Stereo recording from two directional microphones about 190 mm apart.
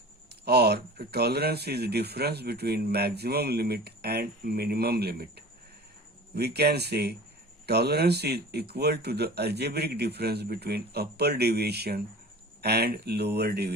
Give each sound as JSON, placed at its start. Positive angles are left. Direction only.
{"t": 0.4, "sound": "speech", "side_deg": -60}